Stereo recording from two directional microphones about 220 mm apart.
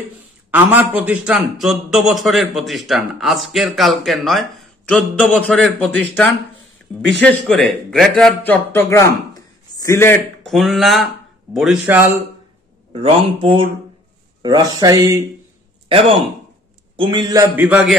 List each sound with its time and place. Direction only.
0.5 s a man's voice: 10° right (ahead or behind)
12.9 s a man's voice: 25° right (ahead or behind)
15.9 s a man's voice: 25° right (ahead or behind); by 17.9 s 5° right (ahead or behind)